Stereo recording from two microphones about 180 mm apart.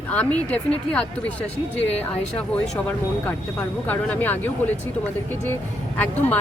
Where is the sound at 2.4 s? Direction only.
Centre (ahead or behind).